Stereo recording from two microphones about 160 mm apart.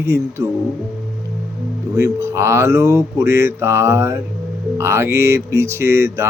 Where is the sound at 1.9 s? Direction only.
20° right (ahead or behind).